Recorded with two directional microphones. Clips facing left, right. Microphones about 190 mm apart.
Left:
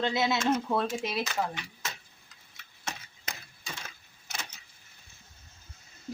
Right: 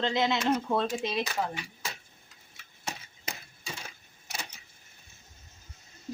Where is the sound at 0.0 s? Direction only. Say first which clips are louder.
Right 1 dB; 10° left (ahead or behind).